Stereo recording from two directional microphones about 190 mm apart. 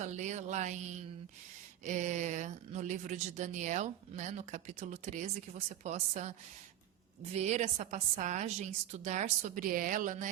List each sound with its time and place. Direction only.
0.0 s speech: 40° right (ahead or behind)